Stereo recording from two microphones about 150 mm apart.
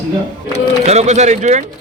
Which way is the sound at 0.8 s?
50° right (ahead or behind).